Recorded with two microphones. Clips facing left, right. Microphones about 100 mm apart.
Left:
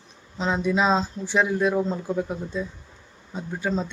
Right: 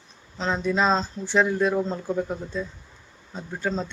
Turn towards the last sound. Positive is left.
turn(degrees=10)  # may be behind; listen again after turning